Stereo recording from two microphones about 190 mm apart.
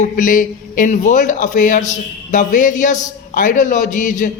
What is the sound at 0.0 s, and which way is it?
A man's voice, 45° left (ahead or behind).